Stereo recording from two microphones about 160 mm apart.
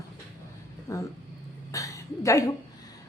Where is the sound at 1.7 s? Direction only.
20° left (ahead or behind).